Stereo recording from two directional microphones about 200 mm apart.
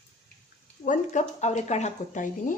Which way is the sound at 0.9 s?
35° left (ahead or behind).